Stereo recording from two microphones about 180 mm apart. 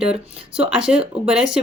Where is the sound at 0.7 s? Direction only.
5° right (ahead or behind).